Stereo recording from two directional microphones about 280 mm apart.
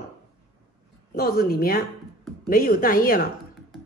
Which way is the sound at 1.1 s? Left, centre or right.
Left.